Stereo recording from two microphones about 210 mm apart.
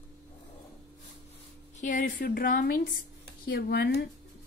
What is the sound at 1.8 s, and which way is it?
A woman's voice, 40° left (ahead or behind).